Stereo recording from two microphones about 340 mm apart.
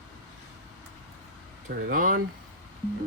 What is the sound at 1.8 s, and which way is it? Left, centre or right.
Speech, right.